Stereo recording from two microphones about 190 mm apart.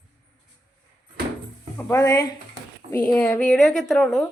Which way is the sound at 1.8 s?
10° left (ahead or behind).